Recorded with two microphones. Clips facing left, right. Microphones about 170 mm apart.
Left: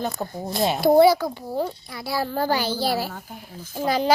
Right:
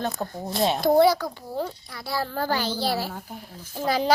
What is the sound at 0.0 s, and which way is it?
Speech, 5° left (ahead or behind).